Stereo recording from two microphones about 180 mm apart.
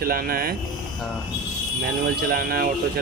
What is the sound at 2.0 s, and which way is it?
Speech, 55° right (ahead or behind).